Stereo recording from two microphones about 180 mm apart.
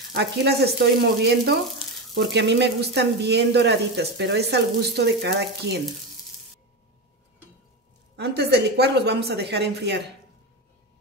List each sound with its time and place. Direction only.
0.1 s speech: 70° right (ahead or behind)
8.2 s speech: 65° right (ahead or behind)